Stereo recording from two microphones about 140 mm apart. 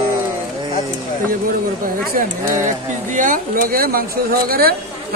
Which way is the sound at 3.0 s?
70° right (ahead or behind).